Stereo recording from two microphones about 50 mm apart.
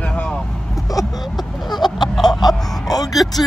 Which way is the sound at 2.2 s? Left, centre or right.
Centre.